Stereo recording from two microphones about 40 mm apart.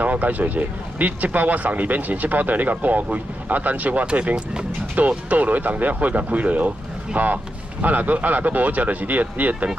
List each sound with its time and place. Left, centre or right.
0.0 s speech: right
4.0 s speech: right
4.9 s speech: right
7.2 s speech: right